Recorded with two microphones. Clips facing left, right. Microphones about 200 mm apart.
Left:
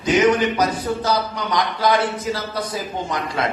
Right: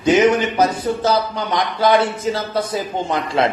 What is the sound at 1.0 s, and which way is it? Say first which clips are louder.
Speech: right 3 dB; 25° right (ahead or behind).